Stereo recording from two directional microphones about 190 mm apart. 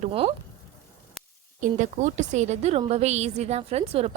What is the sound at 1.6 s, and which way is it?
A woman's voice, 40° right (ahead or behind).